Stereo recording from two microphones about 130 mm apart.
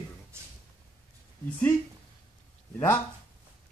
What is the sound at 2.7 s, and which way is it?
Speech, 20° left (ahead or behind).